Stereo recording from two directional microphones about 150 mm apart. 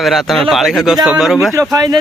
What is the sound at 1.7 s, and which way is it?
Speech, 25° right (ahead or behind).